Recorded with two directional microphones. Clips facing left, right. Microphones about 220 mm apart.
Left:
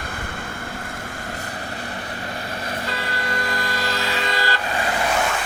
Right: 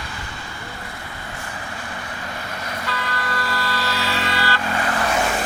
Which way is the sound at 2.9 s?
20° left (ahead or behind).